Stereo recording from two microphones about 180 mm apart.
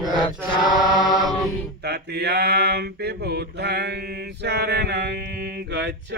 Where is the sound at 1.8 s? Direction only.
65° right (ahead or behind).